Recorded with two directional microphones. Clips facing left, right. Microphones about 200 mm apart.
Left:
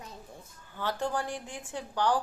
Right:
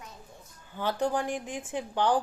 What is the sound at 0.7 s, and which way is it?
A woman's voice, 15° right (ahead or behind).